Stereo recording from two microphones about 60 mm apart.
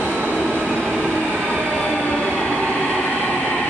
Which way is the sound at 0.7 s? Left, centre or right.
Centre.